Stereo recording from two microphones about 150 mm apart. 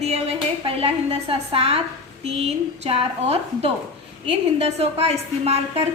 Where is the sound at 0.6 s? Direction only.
35° right (ahead or behind).